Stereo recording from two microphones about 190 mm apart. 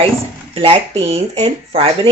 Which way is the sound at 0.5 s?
30° right (ahead or behind).